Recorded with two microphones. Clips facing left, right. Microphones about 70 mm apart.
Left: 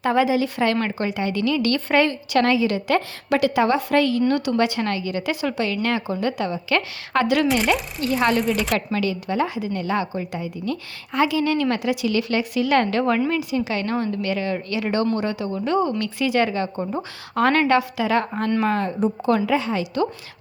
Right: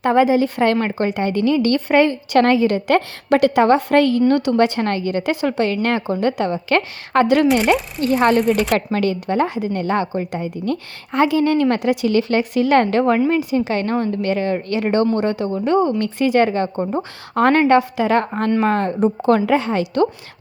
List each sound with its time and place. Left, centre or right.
0.0 s speech: right
2.3 s a woman's voice: right
8.4 s speech: centre
8.7 s a woman's voice: right
13.5 s speech: right
15.5 s a woman's voice: right